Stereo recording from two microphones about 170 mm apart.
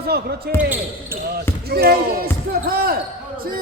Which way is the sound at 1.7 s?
65° right (ahead or behind).